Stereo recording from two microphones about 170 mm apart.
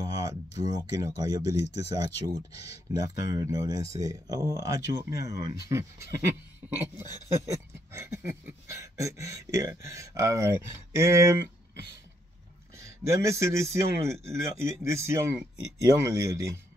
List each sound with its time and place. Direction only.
0.0 s speech: 20° right (ahead or behind)
7.3 s speech: 20° right (ahead or behind)
12.7 s speech: 15° right (ahead or behind)